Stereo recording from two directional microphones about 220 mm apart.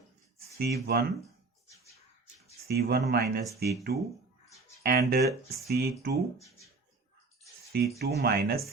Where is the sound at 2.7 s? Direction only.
45° right (ahead or behind).